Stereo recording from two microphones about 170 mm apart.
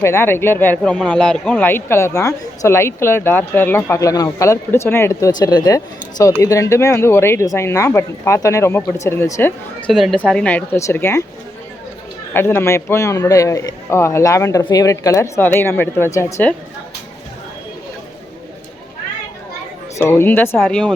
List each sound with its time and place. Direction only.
0.0 s speech: 15° left (ahead or behind)
9.8 s speech: centre (ahead or behind)
12.3 s speech: 15° left (ahead or behind)
20.0 s speech: 15° left (ahead or behind)